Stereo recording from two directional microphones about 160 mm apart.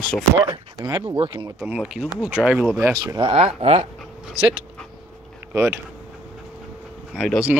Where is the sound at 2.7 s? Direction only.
20° right (ahead or behind).